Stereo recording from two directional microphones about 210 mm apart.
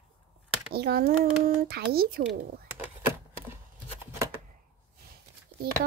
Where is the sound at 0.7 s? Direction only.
50° right (ahead or behind).